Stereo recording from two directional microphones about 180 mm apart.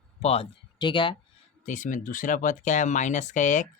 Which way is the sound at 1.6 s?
45° left (ahead or behind).